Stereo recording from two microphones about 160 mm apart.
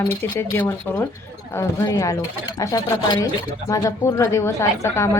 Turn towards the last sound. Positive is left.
turn(degrees=15)  # may be behind; listen again after turning